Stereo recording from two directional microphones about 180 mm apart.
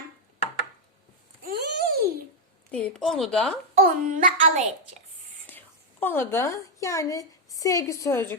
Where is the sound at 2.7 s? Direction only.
5° left (ahead or behind).